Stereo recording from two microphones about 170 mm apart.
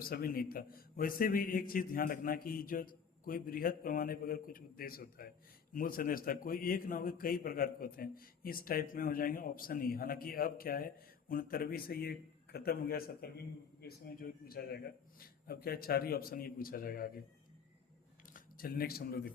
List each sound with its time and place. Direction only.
0.0 s a man's voice: 60° left (ahead or behind)
18.3 s speech: 60° left (ahead or behind)